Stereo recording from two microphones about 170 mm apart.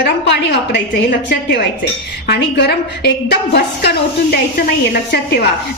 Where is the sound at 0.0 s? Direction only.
90° left.